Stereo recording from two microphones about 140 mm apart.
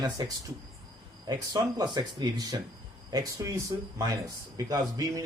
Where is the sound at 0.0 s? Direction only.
30° right (ahead or behind).